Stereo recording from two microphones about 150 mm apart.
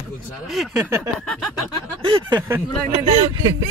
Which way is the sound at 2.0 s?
35° right (ahead or behind).